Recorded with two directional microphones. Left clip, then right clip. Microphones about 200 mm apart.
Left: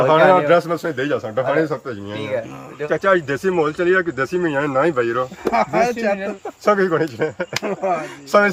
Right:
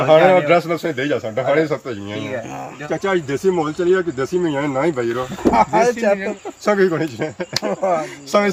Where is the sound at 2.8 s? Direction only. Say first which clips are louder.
Left 4 dB; 25° left (ahead or behind).